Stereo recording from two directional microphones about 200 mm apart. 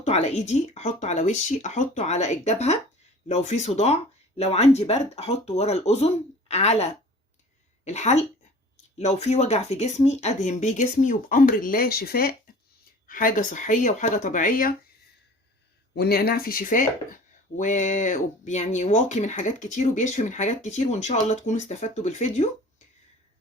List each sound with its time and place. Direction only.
0.0 s speech: 30° left (ahead or behind)
16.0 s speech: 50° left (ahead or behind); by 22.4 s 35° left (ahead or behind)